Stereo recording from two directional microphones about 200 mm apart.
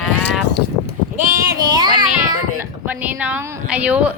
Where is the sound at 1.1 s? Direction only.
40° right (ahead or behind).